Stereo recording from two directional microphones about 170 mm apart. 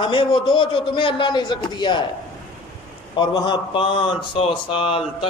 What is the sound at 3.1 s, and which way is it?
A man's voice, 25° left (ahead or behind).